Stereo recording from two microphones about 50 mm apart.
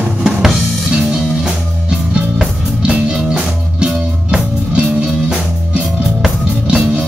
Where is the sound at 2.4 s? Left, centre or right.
Centre.